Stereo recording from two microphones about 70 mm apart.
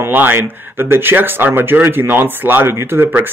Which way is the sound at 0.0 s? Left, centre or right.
Right.